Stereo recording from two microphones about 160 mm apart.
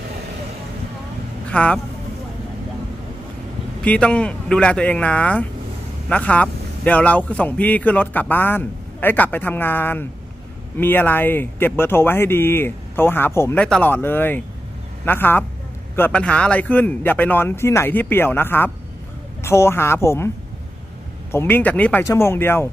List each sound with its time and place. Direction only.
1.5 s speech: 5° left (ahead or behind)
3.8 s speech: 5° left (ahead or behind)
21.3 s speech: 15° left (ahead or behind)